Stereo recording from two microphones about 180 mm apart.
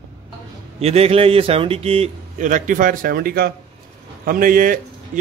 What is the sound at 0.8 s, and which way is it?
Speech, 35° right (ahead or behind).